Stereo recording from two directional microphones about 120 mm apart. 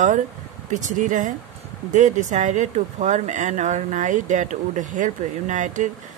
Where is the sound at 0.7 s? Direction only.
90° right.